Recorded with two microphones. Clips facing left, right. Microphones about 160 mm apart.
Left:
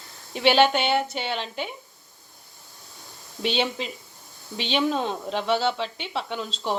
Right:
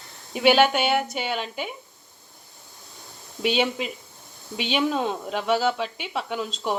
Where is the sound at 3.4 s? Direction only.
5° right (ahead or behind).